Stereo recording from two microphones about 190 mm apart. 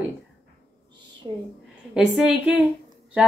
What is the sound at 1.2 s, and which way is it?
Speech, 30° right (ahead or behind).